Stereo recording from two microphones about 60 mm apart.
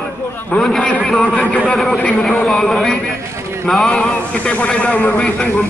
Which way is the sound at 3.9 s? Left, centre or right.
Centre.